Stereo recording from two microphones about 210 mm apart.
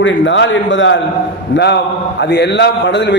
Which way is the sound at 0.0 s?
60° left (ahead or behind).